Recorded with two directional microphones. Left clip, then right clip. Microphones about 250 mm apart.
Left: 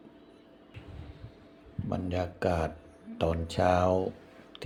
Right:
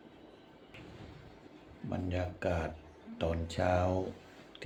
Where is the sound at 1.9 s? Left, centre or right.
Centre.